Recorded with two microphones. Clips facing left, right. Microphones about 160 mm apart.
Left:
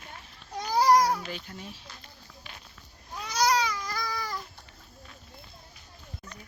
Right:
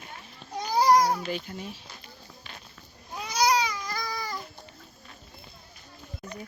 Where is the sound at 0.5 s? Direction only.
5° left (ahead or behind).